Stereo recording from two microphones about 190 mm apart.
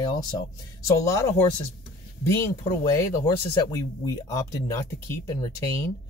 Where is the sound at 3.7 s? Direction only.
15° left (ahead or behind).